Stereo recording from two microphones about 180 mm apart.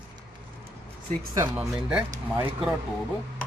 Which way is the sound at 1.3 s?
25° right (ahead or behind).